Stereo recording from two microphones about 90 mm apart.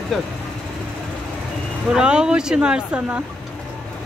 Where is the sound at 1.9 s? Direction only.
10° right (ahead or behind).